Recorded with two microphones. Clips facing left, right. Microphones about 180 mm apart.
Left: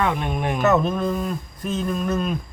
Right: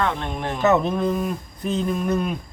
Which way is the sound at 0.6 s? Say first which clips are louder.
Right 1 dB; 20° right (ahead or behind).